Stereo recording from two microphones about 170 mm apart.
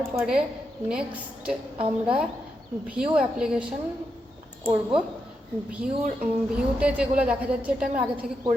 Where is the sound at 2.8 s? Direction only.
5° right (ahead or behind).